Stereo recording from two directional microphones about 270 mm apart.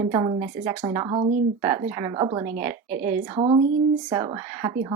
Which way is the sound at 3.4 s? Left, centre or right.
Centre.